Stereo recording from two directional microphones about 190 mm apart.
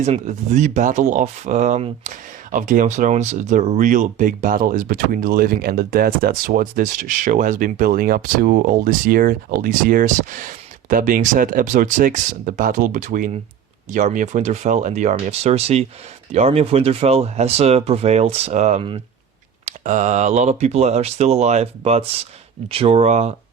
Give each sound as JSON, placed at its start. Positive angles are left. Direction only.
{"t": 0.0, "sound": "speech", "side_deg": -35}
{"t": 19.6, "sound": "speech", "side_deg": -40}